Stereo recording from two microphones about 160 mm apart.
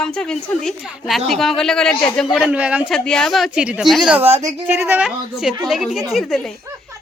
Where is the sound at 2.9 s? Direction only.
5° left (ahead or behind).